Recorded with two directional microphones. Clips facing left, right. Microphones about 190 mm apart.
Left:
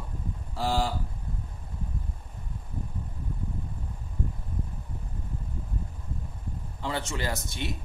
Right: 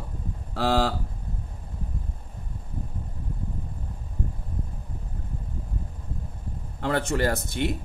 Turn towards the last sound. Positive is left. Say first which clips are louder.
# right 7 dB
turn(degrees=-55)  # may be behind; listen again after turning